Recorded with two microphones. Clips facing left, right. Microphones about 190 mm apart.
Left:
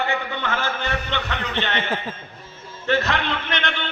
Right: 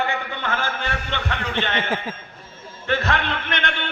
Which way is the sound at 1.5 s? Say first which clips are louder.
Even; 10° right (ahead or behind).